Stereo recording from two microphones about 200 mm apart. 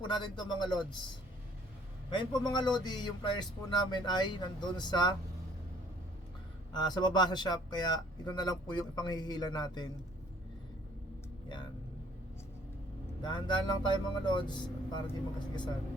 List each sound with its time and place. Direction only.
0.0 s speech: 20° left (ahead or behind)
2.0 s speech: 20° left (ahead or behind)
6.7 s speech: 20° left (ahead or behind)
13.2 s speech: 20° left (ahead or behind)